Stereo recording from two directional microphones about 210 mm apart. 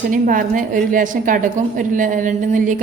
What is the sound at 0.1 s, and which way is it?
A woman's voice, 40° right (ahead or behind).